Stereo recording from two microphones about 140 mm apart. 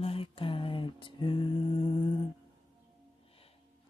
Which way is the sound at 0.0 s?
40° left (ahead or behind).